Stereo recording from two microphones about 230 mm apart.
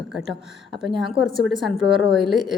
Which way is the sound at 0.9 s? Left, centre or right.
Centre.